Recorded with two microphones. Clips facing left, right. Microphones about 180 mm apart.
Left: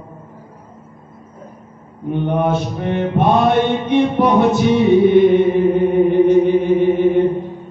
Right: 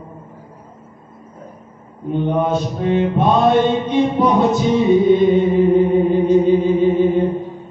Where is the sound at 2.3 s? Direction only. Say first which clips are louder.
Left 1 dB; 60° left (ahead or behind).